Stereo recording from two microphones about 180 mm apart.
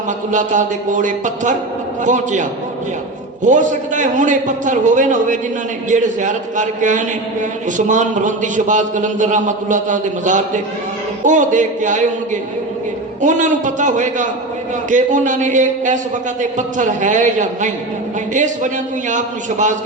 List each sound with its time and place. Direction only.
0.3 s a man's voice: 45° right (ahead or behind)